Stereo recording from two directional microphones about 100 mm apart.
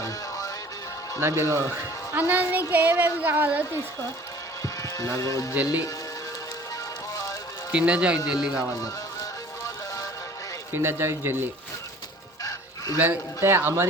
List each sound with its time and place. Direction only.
0.0 s music: 35° left (ahead or behind)
1.2 s a man's voice: 25° right (ahead or behind)
2.1 s a woman's voice: 15° right (ahead or behind)
4.6 s speech: 35° left (ahead or behind)
7.7 s a woman's voice: 10° right (ahead or behind)
9.6 s music: 35° left (ahead or behind)
10.7 s a man's voice: 25° right (ahead or behind)
12.4 s fowl: 35° left (ahead or behind)
13.0 s a man's voice: 25° right (ahead or behind)